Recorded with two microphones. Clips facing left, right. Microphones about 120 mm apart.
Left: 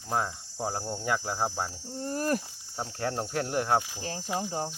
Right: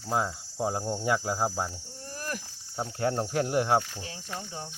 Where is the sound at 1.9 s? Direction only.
35° left (ahead or behind).